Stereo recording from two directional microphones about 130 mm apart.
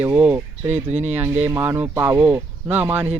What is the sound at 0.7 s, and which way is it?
Speech, 60° right (ahead or behind).